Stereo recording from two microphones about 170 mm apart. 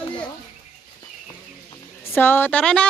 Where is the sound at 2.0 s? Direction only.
15° left (ahead or behind).